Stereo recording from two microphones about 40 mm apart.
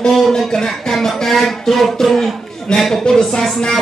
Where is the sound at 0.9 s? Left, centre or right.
Centre.